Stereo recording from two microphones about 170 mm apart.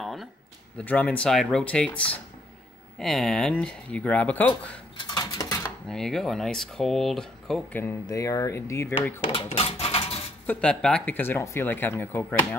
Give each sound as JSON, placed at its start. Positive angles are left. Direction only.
{"t": 0.0, "sound": "a sound", "side_deg": 0}
{"t": 0.7, "sound": "speech", "side_deg": 10}
{"t": 4.9, "sound": "dishes", "side_deg": 25}
{"t": 5.9, "sound": "speech", "side_deg": 0}
{"t": 9.2, "sound": "speech", "side_deg": 30}
{"t": 10.4, "sound": "speech", "side_deg": 10}